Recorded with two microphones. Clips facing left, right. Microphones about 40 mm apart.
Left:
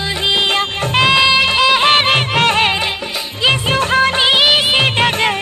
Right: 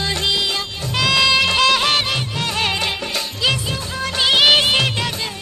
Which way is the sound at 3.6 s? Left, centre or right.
Left.